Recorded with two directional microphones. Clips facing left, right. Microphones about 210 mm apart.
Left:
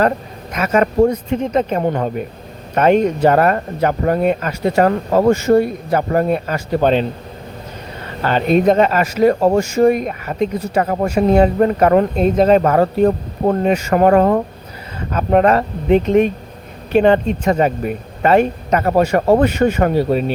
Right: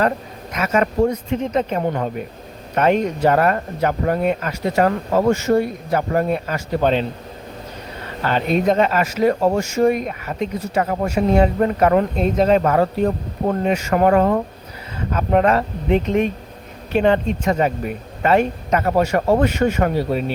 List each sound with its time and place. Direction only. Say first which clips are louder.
0.5 s speech: left 4 dB; 50° left (ahead or behind)
8.2 s a man's voice: left 5 dB; 45° left (ahead or behind)